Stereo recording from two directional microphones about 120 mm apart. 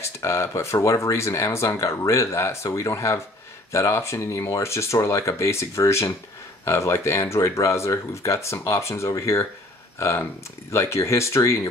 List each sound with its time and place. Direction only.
0.0 s speech: 25° left (ahead or behind)